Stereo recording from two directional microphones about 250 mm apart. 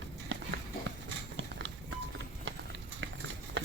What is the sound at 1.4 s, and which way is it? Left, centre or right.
Music, right.